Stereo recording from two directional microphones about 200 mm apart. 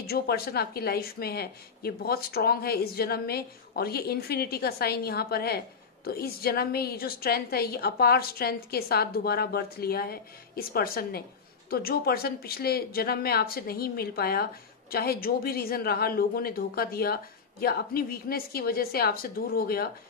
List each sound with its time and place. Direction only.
0.0 s speech: 50° left (ahead or behind)